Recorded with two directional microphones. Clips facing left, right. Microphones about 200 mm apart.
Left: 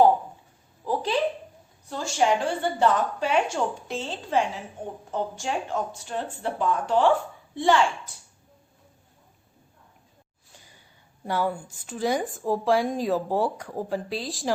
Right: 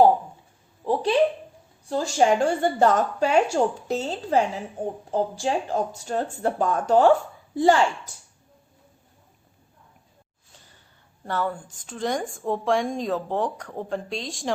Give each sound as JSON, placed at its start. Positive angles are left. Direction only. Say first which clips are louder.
{"t": 1.9, "sound": "speech", "louder": "right 3 dB", "side_deg": -35}
{"t": 10.6, "sound": "a woman's voice", "louder": "left 1 dB", "side_deg": 10}